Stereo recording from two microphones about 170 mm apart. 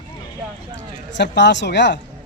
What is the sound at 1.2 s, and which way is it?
Speech, 90° left.